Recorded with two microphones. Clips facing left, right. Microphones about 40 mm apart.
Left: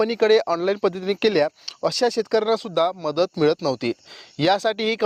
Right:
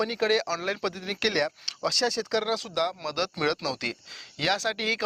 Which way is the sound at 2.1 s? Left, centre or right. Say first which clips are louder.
Left 7 dB; left.